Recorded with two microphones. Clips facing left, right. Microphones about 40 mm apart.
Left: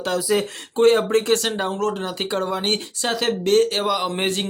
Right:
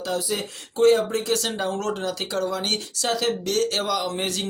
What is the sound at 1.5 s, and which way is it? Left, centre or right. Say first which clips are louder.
Speech: left 2 dB; left.